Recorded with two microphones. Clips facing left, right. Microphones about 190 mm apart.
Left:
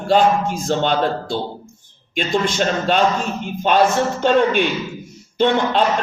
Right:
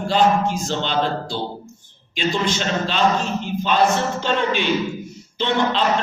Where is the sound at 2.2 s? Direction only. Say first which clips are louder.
Left 3 dB; 50° left (ahead or behind).